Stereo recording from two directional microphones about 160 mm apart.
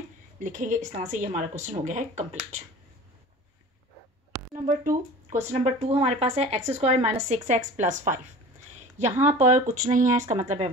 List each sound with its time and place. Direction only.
0.4 s a woman's voice: 55° right (ahead or behind)
4.3 s a sound: 55° right (ahead or behind)
5.5 s a woman's voice: 40° right (ahead or behind)